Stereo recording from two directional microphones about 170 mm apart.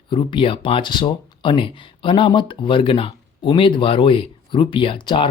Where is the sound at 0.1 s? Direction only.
30° left (ahead or behind).